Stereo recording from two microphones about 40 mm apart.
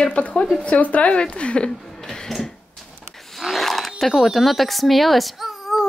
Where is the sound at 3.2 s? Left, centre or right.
Centre.